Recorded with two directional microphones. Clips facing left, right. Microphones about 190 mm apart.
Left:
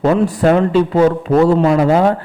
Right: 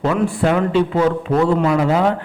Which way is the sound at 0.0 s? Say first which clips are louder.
Left 4 dB; 40° left (ahead or behind).